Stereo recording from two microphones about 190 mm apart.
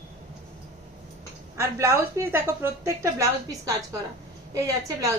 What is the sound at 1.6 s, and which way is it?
A woman's voice, 15° right (ahead or behind).